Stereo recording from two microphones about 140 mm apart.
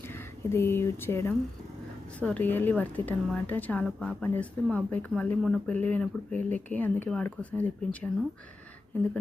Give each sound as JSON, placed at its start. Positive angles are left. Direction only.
{"t": 0.1, "sound": "speech", "side_deg": 15}